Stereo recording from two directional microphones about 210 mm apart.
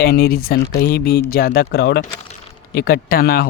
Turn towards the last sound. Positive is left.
turn(degrees=45)  # may be behind; listen again after turning